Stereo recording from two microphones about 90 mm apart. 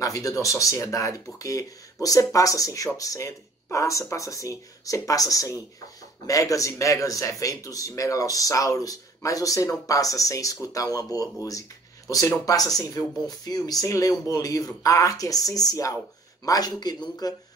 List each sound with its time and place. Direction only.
0.0 s speech: 40° left (ahead or behind)